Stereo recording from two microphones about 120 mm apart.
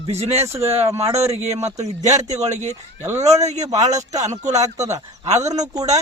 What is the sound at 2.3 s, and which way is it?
Speech, 70° right (ahead or behind).